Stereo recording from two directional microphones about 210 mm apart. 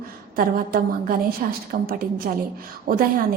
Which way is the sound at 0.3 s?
45° right (ahead or behind).